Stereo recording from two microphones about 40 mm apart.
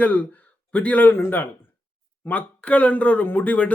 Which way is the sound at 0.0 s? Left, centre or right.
Left.